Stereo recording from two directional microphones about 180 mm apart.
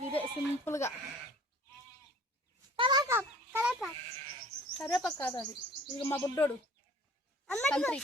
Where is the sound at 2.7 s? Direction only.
25° right (ahead or behind); by 3.9 s 5° right (ahead or behind).